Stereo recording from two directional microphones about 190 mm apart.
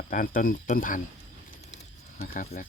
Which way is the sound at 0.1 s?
45° left (ahead or behind).